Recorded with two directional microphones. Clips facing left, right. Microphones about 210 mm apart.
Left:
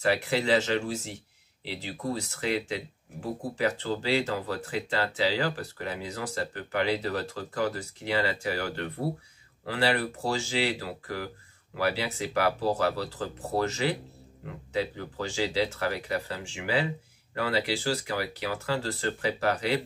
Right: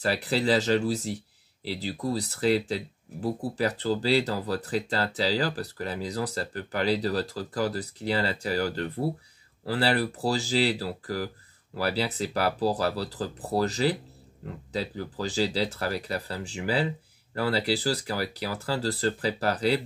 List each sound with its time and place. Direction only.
0.0 s speech: 35° right (ahead or behind)